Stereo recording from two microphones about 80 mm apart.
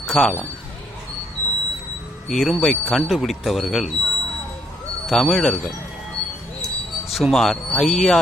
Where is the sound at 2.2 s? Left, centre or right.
Centre.